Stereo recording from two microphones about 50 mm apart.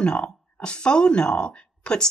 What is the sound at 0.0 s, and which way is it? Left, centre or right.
Speech, left.